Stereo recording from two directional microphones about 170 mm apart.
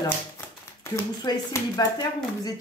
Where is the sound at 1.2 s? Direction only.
20° left (ahead or behind).